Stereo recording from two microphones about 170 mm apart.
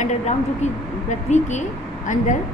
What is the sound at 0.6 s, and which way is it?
A woman's voice, 45° left (ahead or behind).